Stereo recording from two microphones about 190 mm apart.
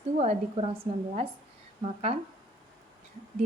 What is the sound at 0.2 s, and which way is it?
A woman's voice, 30° right (ahead or behind).